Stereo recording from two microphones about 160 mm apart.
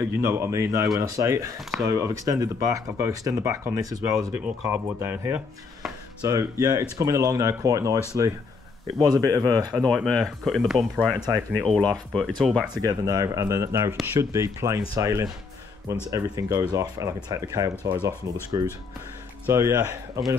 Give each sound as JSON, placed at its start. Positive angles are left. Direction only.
{"t": 0.0, "sound": "speech", "side_deg": -20}
{"t": 9.7, "sound": "speech", "side_deg": 0}
{"t": 11.1, "sound": "speech", "side_deg": -25}
{"t": 11.5, "sound": "speech", "side_deg": 5}
{"t": 12.8, "sound": "speech", "side_deg": -20}